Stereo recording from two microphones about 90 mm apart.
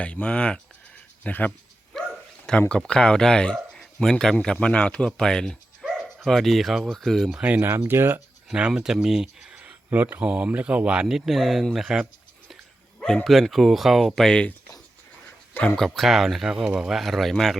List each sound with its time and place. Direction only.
0.0 s speech: 15° left (ahead or behind)
1.9 s bow-wow: 5° left (ahead or behind)
2.5 s speech: 10° left (ahead or behind)
7.3 s speech: 15° right (ahead or behind)
8.4 s speech: 10° right (ahead or behind)
13.2 s speech: centre (ahead or behind)
15.6 s speech: 5° left (ahead or behind)